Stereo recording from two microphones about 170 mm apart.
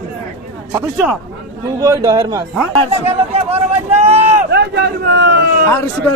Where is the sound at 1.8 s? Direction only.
20° right (ahead or behind).